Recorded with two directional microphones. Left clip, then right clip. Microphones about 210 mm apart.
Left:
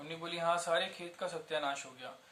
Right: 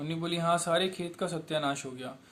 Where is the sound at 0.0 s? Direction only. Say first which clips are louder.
Right 4 dB; 50° right (ahead or behind).